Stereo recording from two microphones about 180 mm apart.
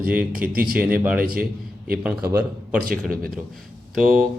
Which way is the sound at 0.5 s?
55° right (ahead or behind).